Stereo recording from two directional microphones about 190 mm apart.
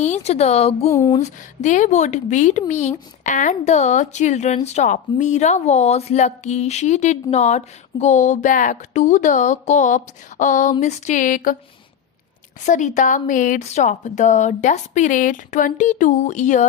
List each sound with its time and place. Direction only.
0.0 s a woman's voice: 35° left (ahead or behind)
0.9 s a sound: 15° left (ahead or behind)
1.2 s a woman's voice: 40° left (ahead or behind)
12.6 s a woman's voice: 40° left (ahead or behind)